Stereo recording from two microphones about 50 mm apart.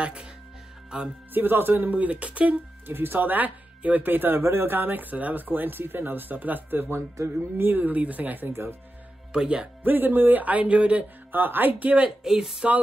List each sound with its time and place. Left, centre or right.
0.0 s speech: centre
0.8 s music: centre
1.3 s speech: right
2.0 s speech: right
2.9 s speech: right
3.3 s speech: right
4.4 s speech: right
9.3 s speech: centre
9.8 s speech: right
11.3 s speech: right
12.2 s speech: centre